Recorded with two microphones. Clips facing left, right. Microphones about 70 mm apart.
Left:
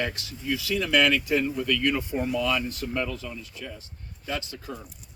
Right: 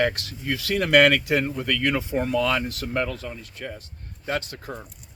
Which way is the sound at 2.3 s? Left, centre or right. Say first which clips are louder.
Right 3 dB; right.